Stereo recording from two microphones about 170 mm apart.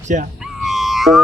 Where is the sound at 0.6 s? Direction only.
Centre (ahead or behind).